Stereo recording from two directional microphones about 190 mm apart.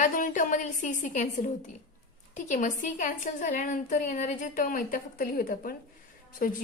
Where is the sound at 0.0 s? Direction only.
45° left (ahead or behind).